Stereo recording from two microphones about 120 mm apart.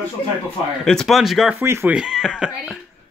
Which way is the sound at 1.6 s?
20° right (ahead or behind).